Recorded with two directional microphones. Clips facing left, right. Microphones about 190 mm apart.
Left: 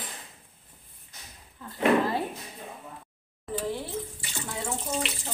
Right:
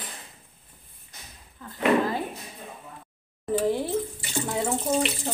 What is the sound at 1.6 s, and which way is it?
Speech, 5° left (ahead or behind).